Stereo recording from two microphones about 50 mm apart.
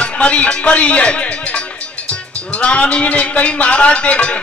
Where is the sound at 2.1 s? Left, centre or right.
Left.